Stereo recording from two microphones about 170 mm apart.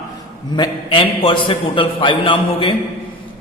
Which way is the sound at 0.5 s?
30° left (ahead or behind).